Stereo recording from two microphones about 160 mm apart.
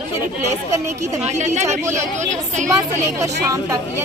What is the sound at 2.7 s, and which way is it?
Speech, 20° right (ahead or behind).